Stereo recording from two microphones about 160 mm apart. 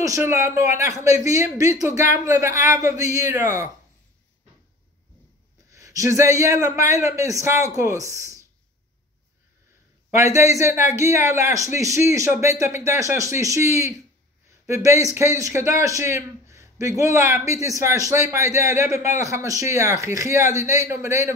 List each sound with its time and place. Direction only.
0.0 s a man's voice: 20° right (ahead or behind)
5.7 s a man's voice: 20° right (ahead or behind)
10.1 s a man's voice: 20° right (ahead or behind)